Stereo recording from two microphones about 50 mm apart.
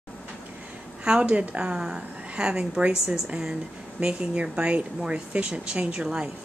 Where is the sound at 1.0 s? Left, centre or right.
Right.